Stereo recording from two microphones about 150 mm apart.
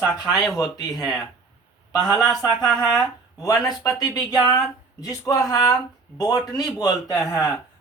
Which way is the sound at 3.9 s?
25° left (ahead or behind).